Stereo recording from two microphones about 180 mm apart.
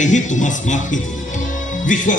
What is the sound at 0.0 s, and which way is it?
Music, 45° left (ahead or behind).